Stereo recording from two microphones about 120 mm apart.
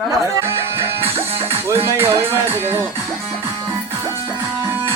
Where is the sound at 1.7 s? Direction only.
20° right (ahead or behind).